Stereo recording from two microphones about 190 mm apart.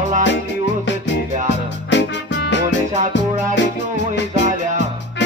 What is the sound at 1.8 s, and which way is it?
Music, 70° left (ahead or behind).